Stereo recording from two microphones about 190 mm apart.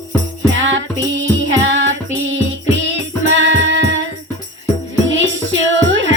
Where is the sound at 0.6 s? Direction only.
80° right.